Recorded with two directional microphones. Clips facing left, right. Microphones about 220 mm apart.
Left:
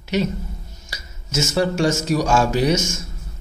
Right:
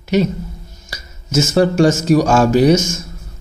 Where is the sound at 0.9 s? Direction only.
45° right (ahead or behind).